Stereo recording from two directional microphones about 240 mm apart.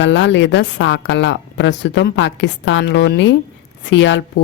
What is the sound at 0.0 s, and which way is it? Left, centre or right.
A woman's voice, left.